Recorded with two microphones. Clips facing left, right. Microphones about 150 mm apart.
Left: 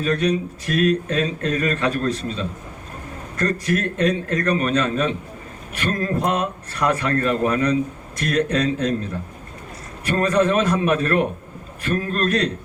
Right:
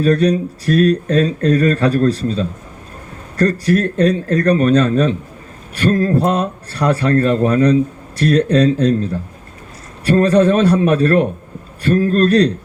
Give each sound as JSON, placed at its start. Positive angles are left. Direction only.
{"t": 0.0, "sound": "a man's voice", "side_deg": -35}